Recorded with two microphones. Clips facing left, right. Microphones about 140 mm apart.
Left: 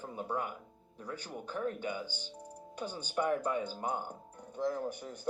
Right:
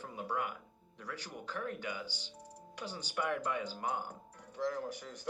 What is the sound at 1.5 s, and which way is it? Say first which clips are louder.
Speech: left 5 dB; 30° left (ahead or behind).